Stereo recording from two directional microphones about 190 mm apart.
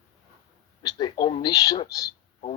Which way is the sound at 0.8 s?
20° left (ahead or behind).